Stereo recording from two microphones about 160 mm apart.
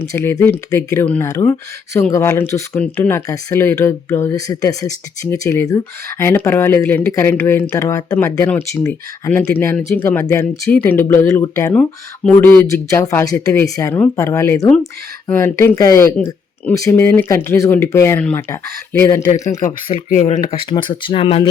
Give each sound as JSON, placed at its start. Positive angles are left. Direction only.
{"t": 0.1, "sound": "speech", "side_deg": 20}
{"t": 16.1, "sound": "speech", "side_deg": 10}
{"t": 19.3, "sound": "speech", "side_deg": 45}
{"t": 20.7, "sound": "speech", "side_deg": 30}